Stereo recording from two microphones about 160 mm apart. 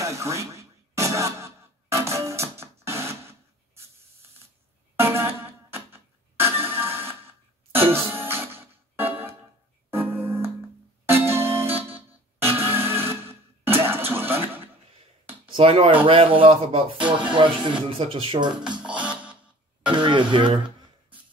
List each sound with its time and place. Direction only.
0.0 s music: 20° right (ahead or behind)
4.9 s music: 15° right (ahead or behind)
15.4 s speech: 35° right (ahead or behind)
18.6 s music: 5° right (ahead or behind)
19.9 s speech: 30° right (ahead or behind)